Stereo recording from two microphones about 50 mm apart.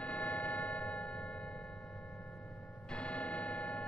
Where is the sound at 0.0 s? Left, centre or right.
Left.